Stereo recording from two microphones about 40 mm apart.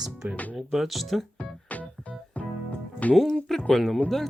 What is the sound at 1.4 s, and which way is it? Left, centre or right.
Music, left.